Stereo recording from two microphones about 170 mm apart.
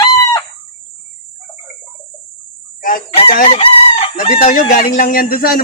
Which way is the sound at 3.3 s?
50° left (ahead or behind).